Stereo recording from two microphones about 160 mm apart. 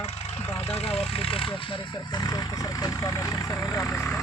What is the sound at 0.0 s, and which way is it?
Vehicle, 40° left (ahead or behind).